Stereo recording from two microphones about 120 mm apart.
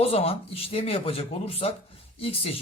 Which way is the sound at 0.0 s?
55° left (ahead or behind).